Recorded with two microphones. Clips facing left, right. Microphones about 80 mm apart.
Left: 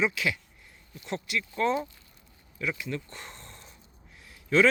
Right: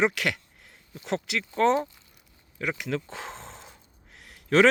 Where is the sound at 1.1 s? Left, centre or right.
Right.